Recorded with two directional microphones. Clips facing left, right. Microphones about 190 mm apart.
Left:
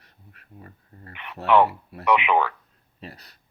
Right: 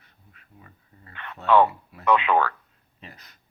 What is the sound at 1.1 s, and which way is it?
Speech, 15° left (ahead or behind).